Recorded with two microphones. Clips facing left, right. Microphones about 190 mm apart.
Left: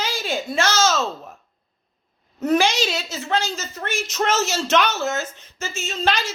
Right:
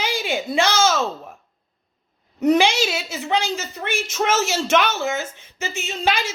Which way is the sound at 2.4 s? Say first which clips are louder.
Right 2 dB; 15° right (ahead or behind).